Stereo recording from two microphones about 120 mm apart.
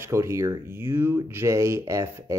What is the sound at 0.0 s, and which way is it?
Speech, 25° right (ahead or behind).